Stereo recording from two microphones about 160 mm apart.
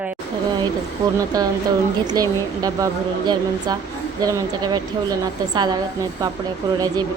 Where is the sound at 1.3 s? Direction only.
25° right (ahead or behind).